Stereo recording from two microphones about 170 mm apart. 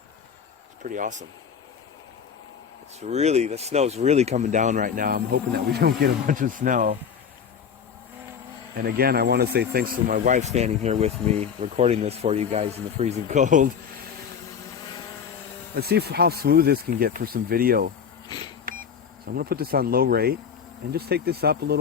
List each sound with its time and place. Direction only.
0.8 s speech: 50° right (ahead or behind)
3.0 s speech: 40° right (ahead or behind)
8.7 s speech: 65° right (ahead or behind); by 13.7 s 50° right (ahead or behind)
15.7 s speech: 70° right (ahead or behind)
19.2 s speech: 65° right (ahead or behind)